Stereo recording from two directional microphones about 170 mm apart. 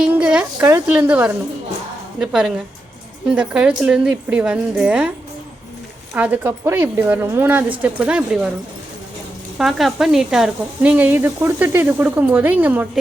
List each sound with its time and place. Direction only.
0.0 s a sound: 5° right (ahead or behind)
0.9 s speech: 5° right (ahead or behind)
6.1 s speech: 10° right (ahead or behind)
9.6 s speech: centre (ahead or behind)